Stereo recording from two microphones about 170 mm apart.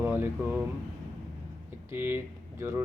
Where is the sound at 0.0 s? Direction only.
10° right (ahead or behind).